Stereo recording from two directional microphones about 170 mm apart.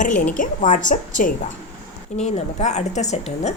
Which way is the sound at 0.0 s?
50° left (ahead or behind).